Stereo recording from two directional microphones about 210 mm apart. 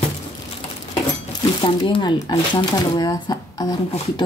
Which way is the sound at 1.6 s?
20° left (ahead or behind).